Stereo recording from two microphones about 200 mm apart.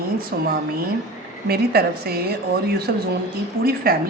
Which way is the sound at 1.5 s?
50° right (ahead or behind).